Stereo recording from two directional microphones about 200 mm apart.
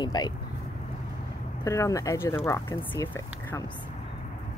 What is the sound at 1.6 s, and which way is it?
Speech, 15° left (ahead or behind).